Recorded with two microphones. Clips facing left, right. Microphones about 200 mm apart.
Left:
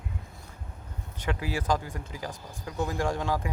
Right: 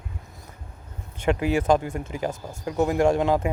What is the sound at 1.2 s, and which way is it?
Speech, 25° right (ahead or behind).